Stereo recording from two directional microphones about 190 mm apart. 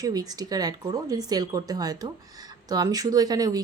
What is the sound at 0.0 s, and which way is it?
Speech, 20° right (ahead or behind).